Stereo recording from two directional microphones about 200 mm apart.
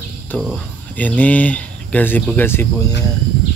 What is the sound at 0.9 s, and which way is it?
Speech, 5° left (ahead or behind).